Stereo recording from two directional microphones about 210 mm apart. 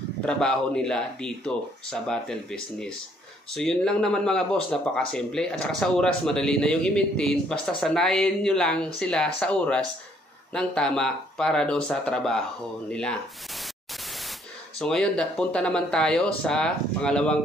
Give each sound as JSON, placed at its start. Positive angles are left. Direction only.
{"t": 0.2, "sound": "speech", "side_deg": 5}
{"t": 14.8, "sound": "speech", "side_deg": 5}